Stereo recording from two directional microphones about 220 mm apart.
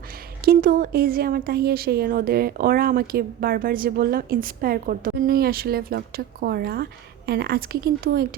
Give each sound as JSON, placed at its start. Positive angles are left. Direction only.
{"t": 0.4, "sound": "speech", "side_deg": -40}